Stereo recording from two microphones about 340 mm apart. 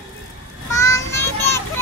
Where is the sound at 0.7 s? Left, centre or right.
Centre.